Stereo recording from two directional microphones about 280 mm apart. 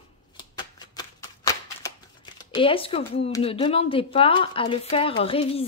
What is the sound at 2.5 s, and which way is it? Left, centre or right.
A woman's voice, centre.